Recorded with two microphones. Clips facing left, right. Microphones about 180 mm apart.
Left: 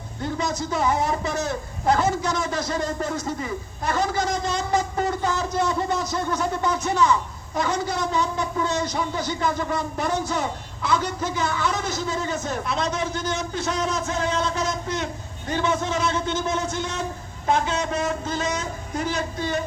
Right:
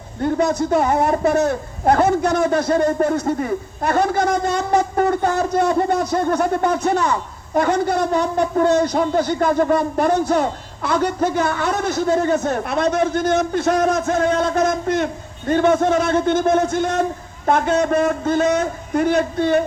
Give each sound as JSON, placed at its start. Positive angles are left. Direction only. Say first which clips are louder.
{"t": 0.2, "sound": "a man's voice", "louder": "right 9 dB", "side_deg": -55}